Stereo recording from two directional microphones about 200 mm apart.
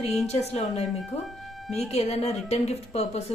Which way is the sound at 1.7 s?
30° left (ahead or behind).